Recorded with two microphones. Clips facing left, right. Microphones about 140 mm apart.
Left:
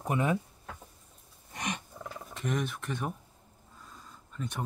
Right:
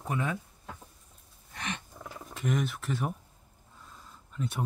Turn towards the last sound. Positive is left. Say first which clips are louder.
# right 3 dB
turn(degrees=-5)  # may be behind; listen again after turning